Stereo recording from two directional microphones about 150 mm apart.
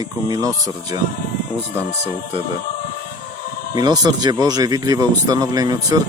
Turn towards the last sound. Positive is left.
turn(degrees=-25)  # may be behind; listen again after turning